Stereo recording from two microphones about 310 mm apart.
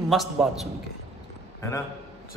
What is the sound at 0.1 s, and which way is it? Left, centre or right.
Speech, centre.